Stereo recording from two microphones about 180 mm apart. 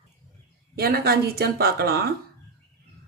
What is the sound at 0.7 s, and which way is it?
Speech, 60° right (ahead or behind).